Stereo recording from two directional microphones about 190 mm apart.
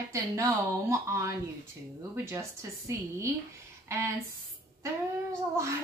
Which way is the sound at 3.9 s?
15° right (ahead or behind).